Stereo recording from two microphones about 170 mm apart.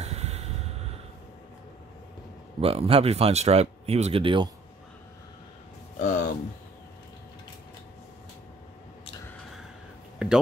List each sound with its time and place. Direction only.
0.0 s vehicle: 40° right (ahead or behind)
2.6 s speech: 35° right (ahead or behind)
5.9 s music: 50° left (ahead or behind)
10.1 s a sound: 5° right (ahead or behind)